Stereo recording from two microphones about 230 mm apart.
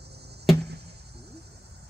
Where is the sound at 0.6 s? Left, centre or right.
Right.